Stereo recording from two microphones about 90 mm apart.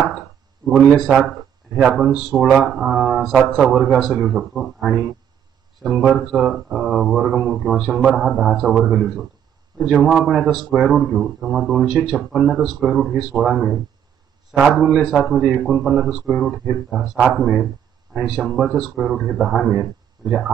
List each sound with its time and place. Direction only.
0.7 s speech: 5° right (ahead or behind)
6.3 s speech: centre (ahead or behind)